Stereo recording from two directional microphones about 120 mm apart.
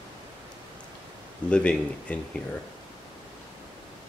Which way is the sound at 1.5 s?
10° left (ahead or behind).